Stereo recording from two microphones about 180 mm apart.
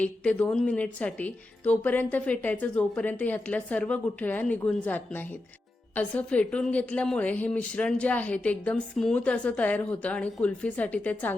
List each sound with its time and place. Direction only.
0.0 s a woman's voice: 5° left (ahead or behind)